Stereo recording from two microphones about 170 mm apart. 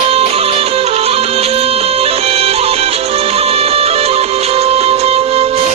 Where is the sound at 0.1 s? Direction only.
35° right (ahead or behind).